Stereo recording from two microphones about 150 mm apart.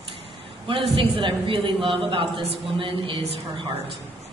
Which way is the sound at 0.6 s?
40° right (ahead or behind).